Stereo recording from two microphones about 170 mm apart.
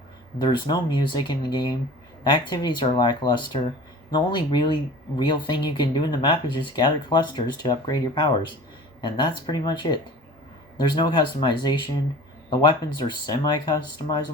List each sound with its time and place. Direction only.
0.4 s speech: 25° left (ahead or behind)